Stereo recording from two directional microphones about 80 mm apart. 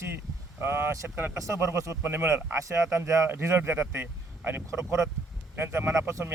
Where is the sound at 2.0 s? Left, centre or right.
Right.